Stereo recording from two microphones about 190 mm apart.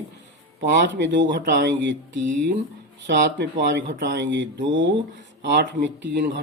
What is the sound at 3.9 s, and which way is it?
Speech, 75° right (ahead or behind).